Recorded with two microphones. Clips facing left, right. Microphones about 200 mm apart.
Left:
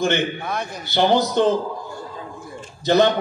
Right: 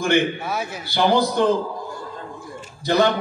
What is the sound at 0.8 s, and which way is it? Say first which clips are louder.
Speech: left 1 dB; 20° left (ahead or behind).